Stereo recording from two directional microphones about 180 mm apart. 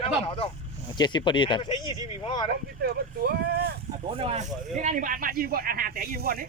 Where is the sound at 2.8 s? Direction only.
60° right (ahead or behind).